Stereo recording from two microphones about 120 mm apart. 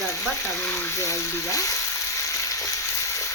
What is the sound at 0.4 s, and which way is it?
Frying, 25° left (ahead or behind).